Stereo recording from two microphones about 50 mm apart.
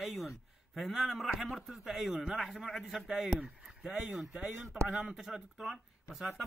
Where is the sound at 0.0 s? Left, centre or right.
Centre.